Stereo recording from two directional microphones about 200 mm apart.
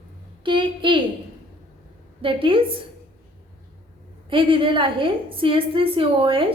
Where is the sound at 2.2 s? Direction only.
25° right (ahead or behind).